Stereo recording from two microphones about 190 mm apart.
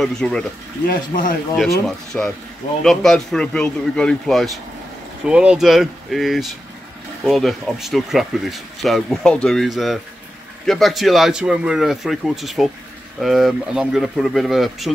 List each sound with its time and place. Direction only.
0.0 s speech: centre (ahead or behind)
0.8 s speech: 45° left (ahead or behind)
1.6 s speech: 5° left (ahead or behind)